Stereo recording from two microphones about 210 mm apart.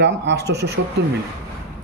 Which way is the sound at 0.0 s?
55° right (ahead or behind).